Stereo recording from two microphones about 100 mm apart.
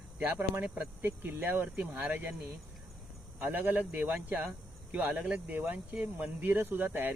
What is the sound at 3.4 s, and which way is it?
Speech, 15° right (ahead or behind).